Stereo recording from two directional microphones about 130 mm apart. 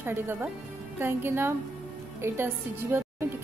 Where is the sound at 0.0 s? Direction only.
15° right (ahead or behind).